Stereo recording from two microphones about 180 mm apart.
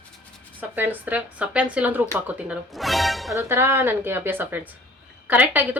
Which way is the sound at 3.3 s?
15° right (ahead or behind).